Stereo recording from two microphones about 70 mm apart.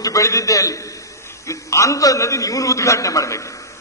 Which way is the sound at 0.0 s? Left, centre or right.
Left.